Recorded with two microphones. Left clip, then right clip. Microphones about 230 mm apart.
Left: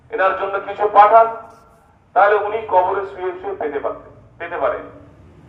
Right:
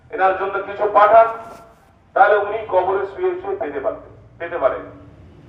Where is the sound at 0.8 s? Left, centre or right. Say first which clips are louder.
Left 1 dB; left.